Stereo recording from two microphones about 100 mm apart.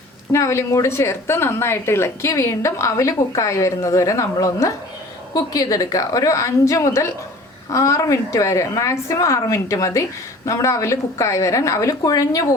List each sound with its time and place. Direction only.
0.3 s a woman's voice: 30° left (ahead or behind)